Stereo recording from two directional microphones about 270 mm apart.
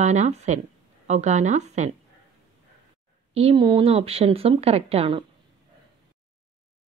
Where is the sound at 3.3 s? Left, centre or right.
Centre.